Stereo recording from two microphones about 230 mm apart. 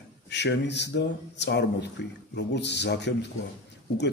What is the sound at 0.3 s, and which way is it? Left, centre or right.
Speech, left.